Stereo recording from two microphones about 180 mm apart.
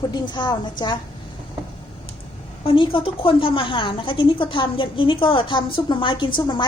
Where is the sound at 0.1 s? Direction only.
25° left (ahead or behind).